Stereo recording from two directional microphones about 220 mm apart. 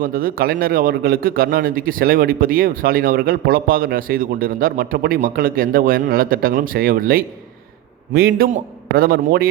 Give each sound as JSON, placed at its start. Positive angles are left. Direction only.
{"t": 0.0, "sound": "a man's voice", "side_deg": -40}